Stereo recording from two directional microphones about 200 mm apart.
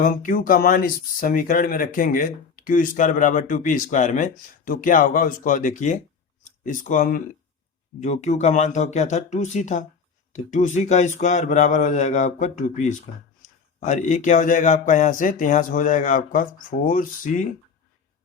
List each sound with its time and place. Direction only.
0.0 s speech: 45° left (ahead or behind)